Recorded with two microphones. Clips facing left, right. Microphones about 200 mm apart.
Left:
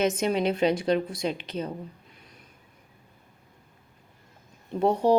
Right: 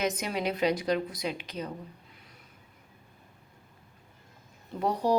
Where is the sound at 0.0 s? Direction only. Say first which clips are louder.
Left 6 dB; 25° left (ahead or behind).